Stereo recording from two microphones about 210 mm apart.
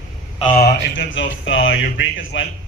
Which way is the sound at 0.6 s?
60° left (ahead or behind).